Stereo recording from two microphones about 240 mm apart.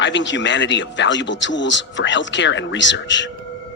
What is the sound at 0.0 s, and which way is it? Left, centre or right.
Speech, left.